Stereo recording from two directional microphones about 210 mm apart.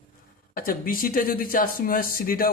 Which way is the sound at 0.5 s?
45° left (ahead or behind).